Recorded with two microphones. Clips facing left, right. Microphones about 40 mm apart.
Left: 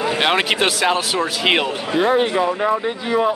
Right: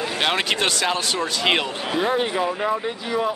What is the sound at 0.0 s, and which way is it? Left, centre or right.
Speech, centre.